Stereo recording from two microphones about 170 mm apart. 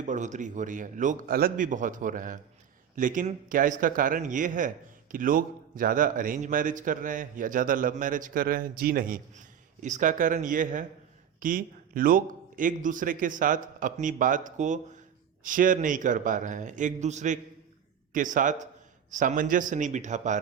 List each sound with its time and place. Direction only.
0.0 s a man's voice: 45° right (ahead or behind)